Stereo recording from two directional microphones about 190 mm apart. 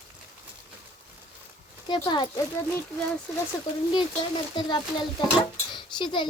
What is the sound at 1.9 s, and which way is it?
Speech, 20° left (ahead or behind).